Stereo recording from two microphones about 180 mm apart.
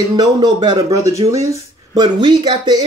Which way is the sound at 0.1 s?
20° right (ahead or behind).